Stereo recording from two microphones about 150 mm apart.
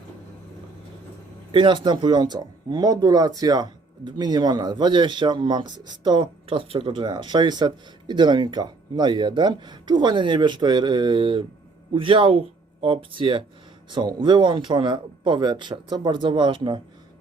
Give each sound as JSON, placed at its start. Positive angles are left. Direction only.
{"t": 1.5, "sound": "speech", "side_deg": -35}